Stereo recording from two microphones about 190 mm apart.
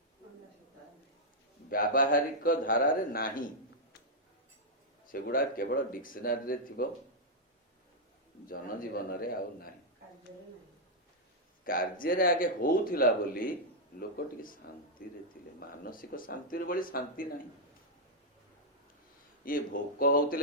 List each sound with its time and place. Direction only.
1.7 s speech: 50° left (ahead or behind)
5.0 s speech: 50° left (ahead or behind)
8.4 s speech: 50° left (ahead or behind)
11.6 s speech: 50° left (ahead or behind)
15.4 s a sound: 50° left (ahead or behind)
15.8 s speech: 50° left (ahead or behind)
19.5 s speech: 50° left (ahead or behind)